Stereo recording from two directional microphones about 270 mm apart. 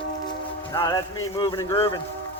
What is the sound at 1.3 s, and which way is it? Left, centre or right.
Speech, centre.